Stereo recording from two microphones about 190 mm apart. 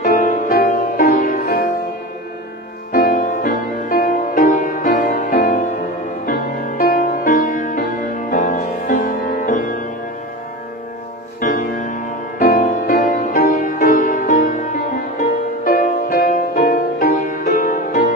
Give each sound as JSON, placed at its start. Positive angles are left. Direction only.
{"t": 0.0, "sound": "music", "side_deg": 45}
{"t": 2.9, "sound": "music", "side_deg": 45}
{"t": 11.4, "sound": "music", "side_deg": 45}